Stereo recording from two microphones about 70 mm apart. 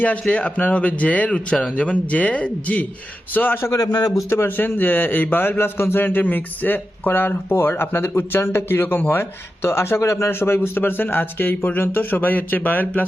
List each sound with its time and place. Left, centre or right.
0.0 s a man's voice: left
3.7 s a man's voice: left
4.3 s a man's voice: left